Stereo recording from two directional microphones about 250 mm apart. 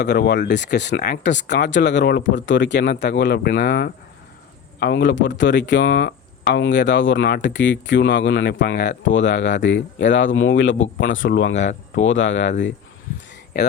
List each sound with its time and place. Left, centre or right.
0.0 s speech: left